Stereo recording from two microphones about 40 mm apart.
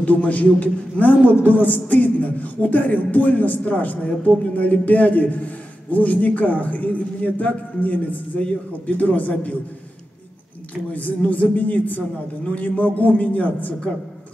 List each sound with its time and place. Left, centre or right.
0.0 s a man's voice: left
10.7 s a man's voice: left